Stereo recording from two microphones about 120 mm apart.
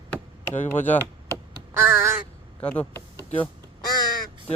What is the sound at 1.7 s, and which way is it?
Crow, 20° right (ahead or behind).